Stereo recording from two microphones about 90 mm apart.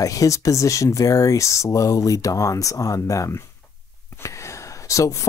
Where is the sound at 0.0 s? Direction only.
35° left (ahead or behind).